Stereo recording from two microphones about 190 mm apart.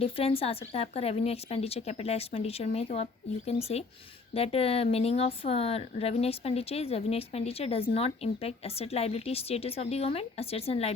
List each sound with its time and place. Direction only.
0.0 s a woman's voice: 30° left (ahead or behind)